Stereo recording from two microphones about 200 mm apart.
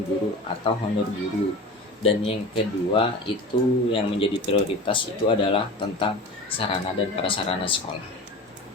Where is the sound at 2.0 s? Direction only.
30° left (ahead or behind).